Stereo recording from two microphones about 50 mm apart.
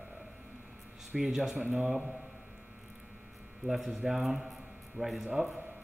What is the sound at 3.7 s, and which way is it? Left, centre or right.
A man's voice, centre.